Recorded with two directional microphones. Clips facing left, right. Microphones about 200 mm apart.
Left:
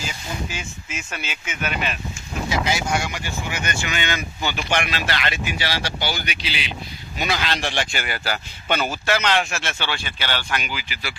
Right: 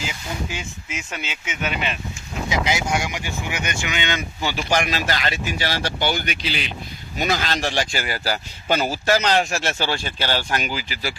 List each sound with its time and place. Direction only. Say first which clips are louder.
0.0 s speech: right 1 dB; 15° right (ahead or behind)
4.5 s speech: right 2 dB; 35° right (ahead or behind)